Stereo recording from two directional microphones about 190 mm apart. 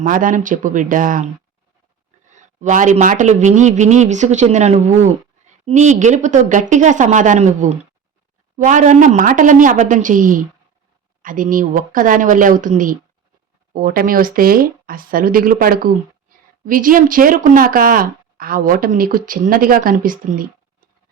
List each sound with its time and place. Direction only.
0.0 s speech: 45° right (ahead or behind)
2.3 s speech: 40° right (ahead or behind)